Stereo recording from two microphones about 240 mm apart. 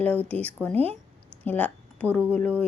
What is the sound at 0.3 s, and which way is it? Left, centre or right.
A woman's voice, centre.